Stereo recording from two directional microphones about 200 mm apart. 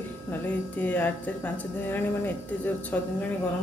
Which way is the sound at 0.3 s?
10° left (ahead or behind).